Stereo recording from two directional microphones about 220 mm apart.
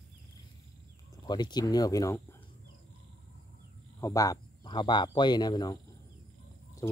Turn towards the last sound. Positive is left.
turn(degrees=15)  # may be behind; listen again after turning